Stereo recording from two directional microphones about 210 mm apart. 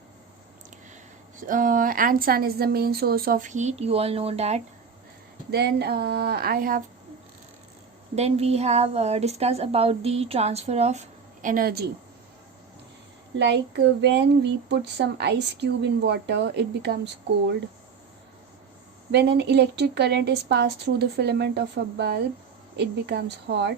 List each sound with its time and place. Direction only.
1.4 s a woman's voice: 40° right (ahead or behind)
5.5 s speech: 50° right (ahead or behind)
8.1 s a woman's voice: 30° right (ahead or behind); by 11.9 s 45° right (ahead or behind)
13.4 s speech: 55° right (ahead or behind)
19.1 s speech: 50° right (ahead or behind)